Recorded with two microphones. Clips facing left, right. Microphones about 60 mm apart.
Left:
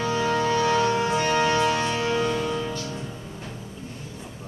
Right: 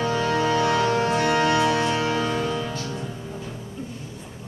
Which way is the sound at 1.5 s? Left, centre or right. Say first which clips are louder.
Right 2 dB; centre.